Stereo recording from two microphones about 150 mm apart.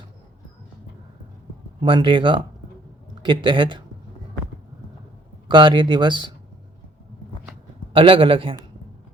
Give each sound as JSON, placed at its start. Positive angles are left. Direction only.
{"t": 1.8, "sound": "speech", "side_deg": -35}
{"t": 5.5, "sound": "speech", "side_deg": -30}
{"t": 7.9, "sound": "speech", "side_deg": -35}